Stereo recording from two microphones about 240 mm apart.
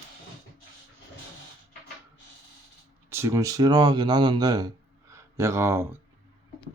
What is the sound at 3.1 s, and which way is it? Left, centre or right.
Speech, centre.